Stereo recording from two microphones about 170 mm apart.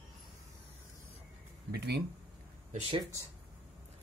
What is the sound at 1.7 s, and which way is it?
Speech, 70° right (ahead or behind).